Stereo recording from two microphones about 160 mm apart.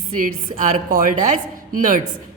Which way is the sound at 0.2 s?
55° right (ahead or behind).